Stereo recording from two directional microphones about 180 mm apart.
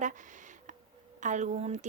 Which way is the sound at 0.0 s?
45° right (ahead or behind).